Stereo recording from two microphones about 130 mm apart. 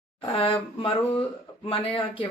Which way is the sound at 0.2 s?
40° left (ahead or behind).